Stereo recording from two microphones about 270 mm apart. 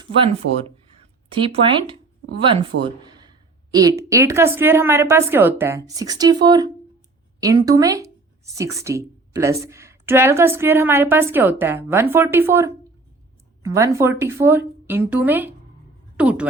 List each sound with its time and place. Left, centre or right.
0.0 s speech: right
2.7 s speech: right
3.2 s a sound: centre
4.1 s speech: centre